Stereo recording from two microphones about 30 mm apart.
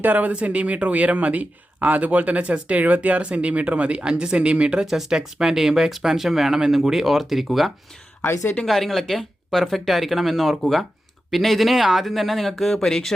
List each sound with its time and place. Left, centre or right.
0.0 s speech: right
0.3 s speech: right
3.2 s speech: right
4.8 s speech: centre
12.8 s speech: centre